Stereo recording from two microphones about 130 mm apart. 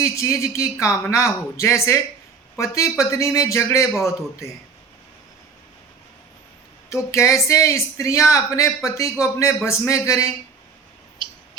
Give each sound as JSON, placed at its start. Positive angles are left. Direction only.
{"t": 0.0, "sound": "a woman's voice", "side_deg": 25}
{"t": 6.9, "sound": "a woman's voice", "side_deg": 20}